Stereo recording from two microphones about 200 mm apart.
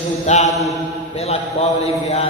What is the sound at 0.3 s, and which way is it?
Mantra, 35° left (ahead or behind).